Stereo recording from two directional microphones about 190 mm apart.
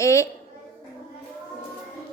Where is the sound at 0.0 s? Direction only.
15° left (ahead or behind).